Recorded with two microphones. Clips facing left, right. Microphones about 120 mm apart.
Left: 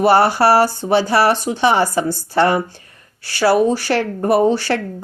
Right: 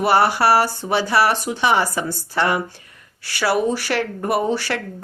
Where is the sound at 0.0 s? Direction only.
35° left (ahead or behind).